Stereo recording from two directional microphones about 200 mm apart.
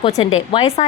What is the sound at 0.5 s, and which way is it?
Speech, 30° left (ahead or behind).